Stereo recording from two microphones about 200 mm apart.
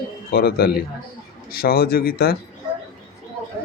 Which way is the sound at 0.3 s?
50° left (ahead or behind).